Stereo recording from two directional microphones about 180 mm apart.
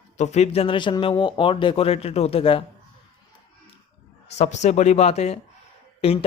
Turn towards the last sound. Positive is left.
turn(degrees=30)  # may be behind; listen again after turning